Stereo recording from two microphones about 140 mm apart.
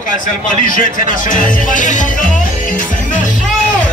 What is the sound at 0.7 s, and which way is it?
Speech, 75° left (ahead or behind).